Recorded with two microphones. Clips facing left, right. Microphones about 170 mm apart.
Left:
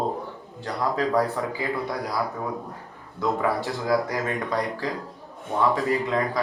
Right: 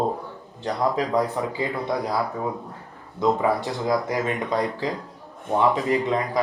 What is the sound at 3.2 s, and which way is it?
Speech, 20° right (ahead or behind).